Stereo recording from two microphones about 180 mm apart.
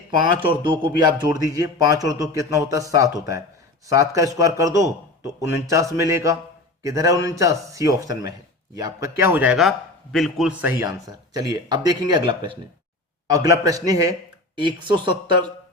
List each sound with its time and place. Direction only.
0.3 s a man's voice: 30° right (ahead or behind); by 10.8 s 10° right (ahead or behind)
10.8 s speech: 20° right (ahead or behind)